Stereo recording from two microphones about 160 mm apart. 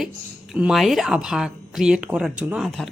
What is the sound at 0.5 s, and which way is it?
A woman's voice, 5° right (ahead or behind).